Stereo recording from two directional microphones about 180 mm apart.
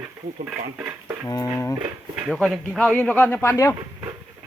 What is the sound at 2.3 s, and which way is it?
Speech, centre (ahead or behind).